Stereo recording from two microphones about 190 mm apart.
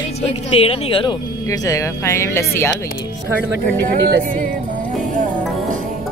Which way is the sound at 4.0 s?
60° right (ahead or behind).